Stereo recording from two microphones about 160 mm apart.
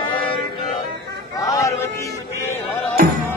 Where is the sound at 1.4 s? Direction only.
20° left (ahead or behind).